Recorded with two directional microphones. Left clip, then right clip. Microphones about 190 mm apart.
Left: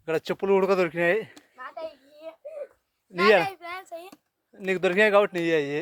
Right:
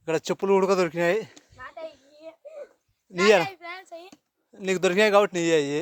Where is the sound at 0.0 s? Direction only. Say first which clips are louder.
Right 1 dB; 35° right (ahead or behind).